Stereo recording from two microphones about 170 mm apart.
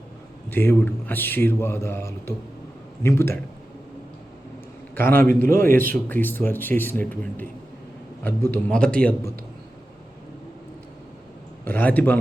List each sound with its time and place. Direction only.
0.5 s a man's voice: 10° left (ahead or behind)
4.9 s a man's voice: 10° left (ahead or behind)
5.4 s a man's voice: 55° right (ahead or behind)
6.1 s a man's voice: 10° left (ahead or behind)
11.6 s a man's voice: 10° left (ahead or behind)